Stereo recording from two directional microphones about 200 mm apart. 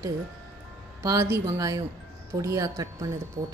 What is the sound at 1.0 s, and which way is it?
Speech, 15° right (ahead or behind).